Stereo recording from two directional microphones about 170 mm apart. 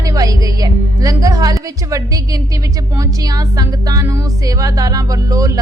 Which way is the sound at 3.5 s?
20° right (ahead or behind).